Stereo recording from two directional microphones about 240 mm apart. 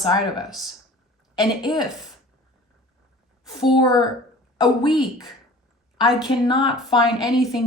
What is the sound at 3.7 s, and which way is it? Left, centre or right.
Speech, centre.